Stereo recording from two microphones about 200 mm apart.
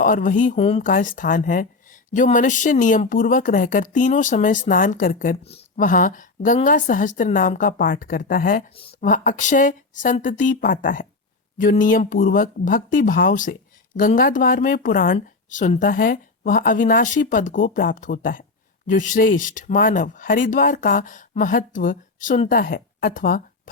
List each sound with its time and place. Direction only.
0.0 s speech: 40° left (ahead or behind)